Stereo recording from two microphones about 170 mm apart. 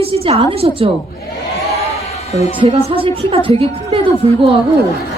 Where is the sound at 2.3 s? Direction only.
40° left (ahead or behind).